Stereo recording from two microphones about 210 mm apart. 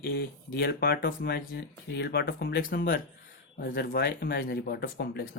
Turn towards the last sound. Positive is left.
turn(degrees=50)  # may be behind; listen again after turning